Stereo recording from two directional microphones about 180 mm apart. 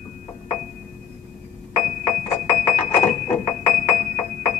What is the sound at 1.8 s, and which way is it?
Music, 45° left (ahead or behind).